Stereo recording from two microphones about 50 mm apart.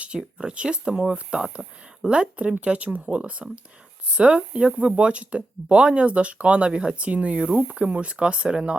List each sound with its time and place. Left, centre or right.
0.2 s speech: centre